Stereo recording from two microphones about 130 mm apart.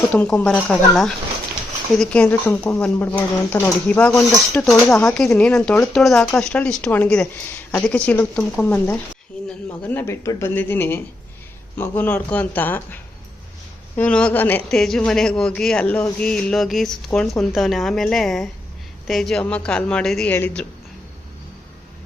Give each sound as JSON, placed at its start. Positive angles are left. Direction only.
{"t": 0.1, "sound": "a woman's voice", "side_deg": 10}
{"t": 5.4, "sound": "a woman's voice", "side_deg": 10}